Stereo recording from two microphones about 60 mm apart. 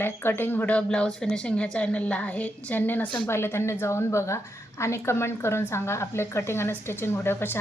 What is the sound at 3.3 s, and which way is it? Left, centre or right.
A woman's voice, left.